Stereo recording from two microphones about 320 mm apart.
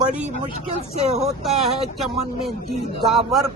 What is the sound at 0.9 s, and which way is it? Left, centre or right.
Vehicle, centre.